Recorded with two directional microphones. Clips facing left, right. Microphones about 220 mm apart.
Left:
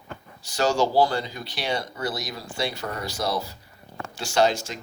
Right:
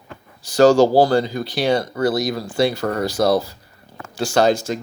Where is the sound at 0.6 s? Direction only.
90° right.